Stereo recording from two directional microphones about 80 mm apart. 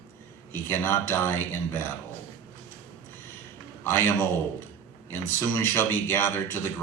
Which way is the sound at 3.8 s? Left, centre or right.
Left.